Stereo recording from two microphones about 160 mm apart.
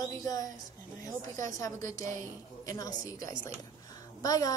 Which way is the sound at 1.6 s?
20° left (ahead or behind).